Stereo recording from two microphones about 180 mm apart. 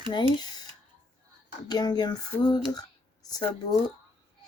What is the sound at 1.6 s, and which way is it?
Speech, 20° left (ahead or behind).